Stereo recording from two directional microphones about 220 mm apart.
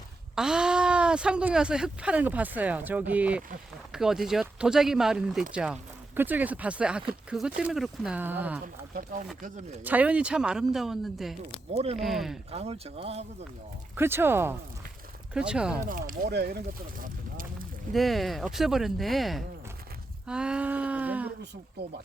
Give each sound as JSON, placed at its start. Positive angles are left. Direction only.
{"t": 0.3, "sound": "speech", "side_deg": -5}
{"t": 9.8, "sound": "speech", "side_deg": -5}
{"t": 11.7, "sound": "speech", "side_deg": -30}
{"t": 11.9, "sound": "speech", "side_deg": 0}
{"t": 12.5, "sound": "speech", "side_deg": -25}
{"t": 13.9, "sound": "speech", "side_deg": -10}
{"t": 15.9, "sound": "speech", "side_deg": -40}
{"t": 17.9, "sound": "speech", "side_deg": 0}
{"t": 20.2, "sound": "a sound", "side_deg": -5}